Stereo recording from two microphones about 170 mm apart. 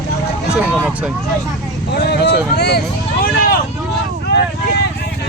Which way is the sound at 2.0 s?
70° left (ahead or behind).